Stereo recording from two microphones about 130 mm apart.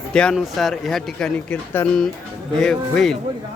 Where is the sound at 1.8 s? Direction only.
20° left (ahead or behind).